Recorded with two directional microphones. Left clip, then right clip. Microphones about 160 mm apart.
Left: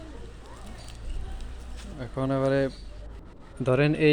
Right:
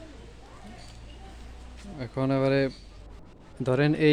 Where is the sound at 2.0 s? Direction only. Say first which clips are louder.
Right 1 dB; 45° right (ahead or behind).